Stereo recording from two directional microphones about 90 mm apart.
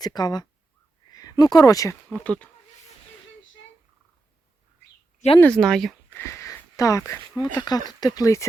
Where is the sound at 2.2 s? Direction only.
15° left (ahead or behind).